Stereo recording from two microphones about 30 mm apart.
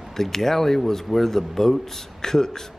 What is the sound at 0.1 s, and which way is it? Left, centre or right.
Speech, centre.